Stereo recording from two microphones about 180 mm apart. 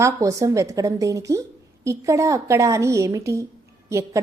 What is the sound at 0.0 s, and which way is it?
A woman's voice, 20° right (ahead or behind).